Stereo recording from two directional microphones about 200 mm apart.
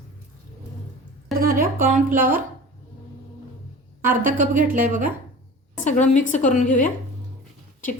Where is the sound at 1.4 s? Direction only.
45° right (ahead or behind).